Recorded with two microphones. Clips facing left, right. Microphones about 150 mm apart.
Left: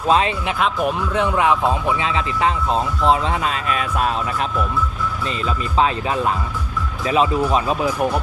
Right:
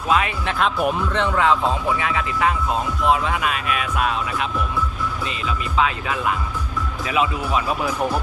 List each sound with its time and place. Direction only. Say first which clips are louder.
0.1 s speech: left 3 dB; 30° left (ahead or behind)
0.6 s speech: even; centre (ahead or behind)
1.1 s speech: left 3 dB; 15° left (ahead or behind); by 7.8 s 35° left (ahead or behind)